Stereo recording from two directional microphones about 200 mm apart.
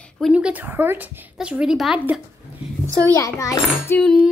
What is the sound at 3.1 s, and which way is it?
Speech, 15° left (ahead or behind).